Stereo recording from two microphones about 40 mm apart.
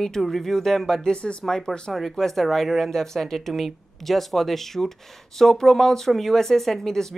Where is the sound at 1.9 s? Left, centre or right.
Centre.